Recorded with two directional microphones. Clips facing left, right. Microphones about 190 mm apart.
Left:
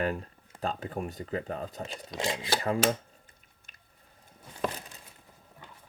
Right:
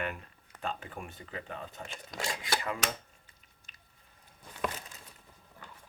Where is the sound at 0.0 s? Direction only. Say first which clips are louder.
Left 7 dB; 35° left (ahead or behind).